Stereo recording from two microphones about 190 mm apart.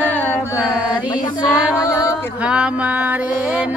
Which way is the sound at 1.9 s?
20° left (ahead or behind).